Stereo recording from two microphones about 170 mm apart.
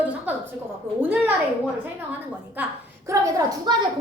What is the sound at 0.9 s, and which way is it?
Speech, 10° right (ahead or behind).